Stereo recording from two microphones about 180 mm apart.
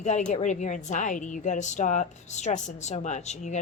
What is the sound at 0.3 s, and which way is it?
A woman's voice, 40° left (ahead or behind).